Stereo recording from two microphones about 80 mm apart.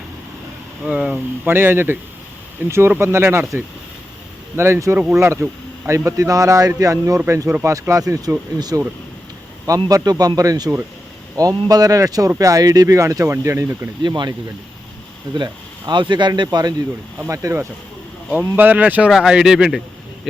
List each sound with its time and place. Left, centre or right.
0.9 s speech: centre
1.5 s speech: right
14.0 s speech: right
15.9 s speech: right
17.2 s speech: right
18.5 s speech: right
19.1 s speech: centre